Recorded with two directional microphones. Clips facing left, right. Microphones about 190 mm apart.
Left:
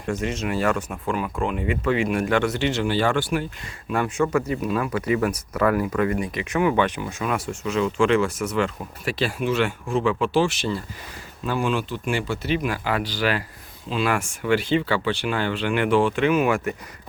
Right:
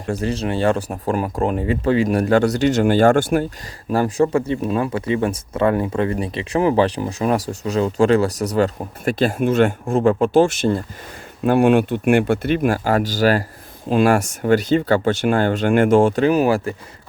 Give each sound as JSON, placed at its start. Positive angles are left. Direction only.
{"t": 0.1, "sound": "speech", "side_deg": -35}
{"t": 3.8, "sound": "speech", "side_deg": -35}
{"t": 11.4, "sound": "speech", "side_deg": -60}